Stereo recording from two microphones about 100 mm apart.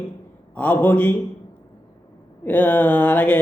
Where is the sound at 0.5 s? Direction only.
20° left (ahead or behind).